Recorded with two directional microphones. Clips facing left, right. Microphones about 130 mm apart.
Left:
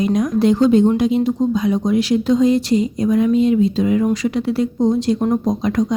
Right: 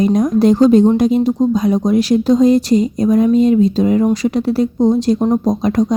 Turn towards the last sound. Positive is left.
turn(degrees=-35)  # may be behind; listen again after turning